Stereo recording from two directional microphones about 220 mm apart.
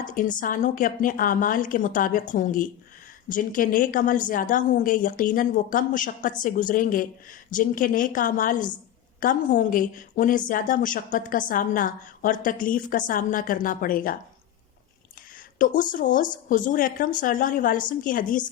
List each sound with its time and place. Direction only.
0.0 s a woman's voice: 35° left (ahead or behind)
15.5 s a woman's voice: 35° left (ahead or behind)